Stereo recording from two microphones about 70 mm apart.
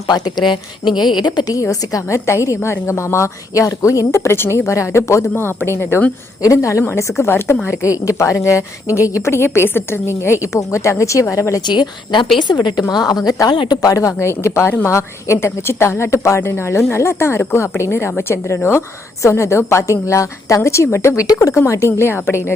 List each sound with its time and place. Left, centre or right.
0.9 s speech: left
1.5 s a woman's voice: left
5.3 s a woman's voice: left
6.4 s a woman's voice: left
7.2 s a woman's voice: left
11.6 s a woman's voice: left
13.2 s a woman's voice: left
21.2 s speech: left
21.5 s a woman's voice: left